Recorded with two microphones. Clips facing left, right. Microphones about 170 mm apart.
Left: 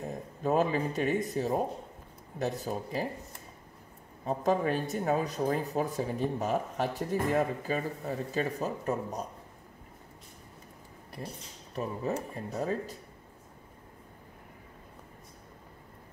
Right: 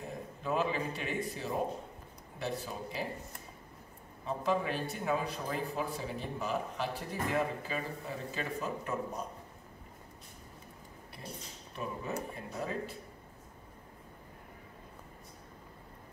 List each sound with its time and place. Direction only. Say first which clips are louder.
0.4 s speech: left 6 dB; 45° left (ahead or behind)
4.2 s speech: left 4 dB; 45° left (ahead or behind)
11.7 s speech: left 5 dB; 40° left (ahead or behind)